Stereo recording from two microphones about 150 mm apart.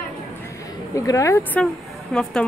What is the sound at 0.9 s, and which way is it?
A woman's voice, 20° left (ahead or behind).